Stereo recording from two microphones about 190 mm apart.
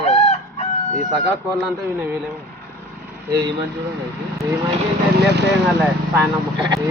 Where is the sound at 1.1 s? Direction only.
Centre (ahead or behind).